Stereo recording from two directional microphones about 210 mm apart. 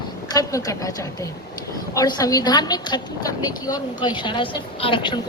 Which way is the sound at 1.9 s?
15° left (ahead or behind).